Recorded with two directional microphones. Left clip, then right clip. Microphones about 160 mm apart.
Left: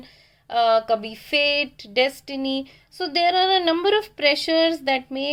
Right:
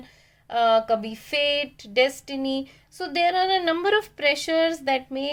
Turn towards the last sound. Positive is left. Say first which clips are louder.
# left 2 dB
turn(degrees=20)  # may be behind; listen again after turning